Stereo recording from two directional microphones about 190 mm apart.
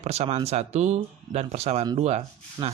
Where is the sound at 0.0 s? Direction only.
35° right (ahead or behind).